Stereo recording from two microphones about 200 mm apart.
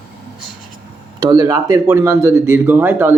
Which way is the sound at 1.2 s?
20° right (ahead or behind).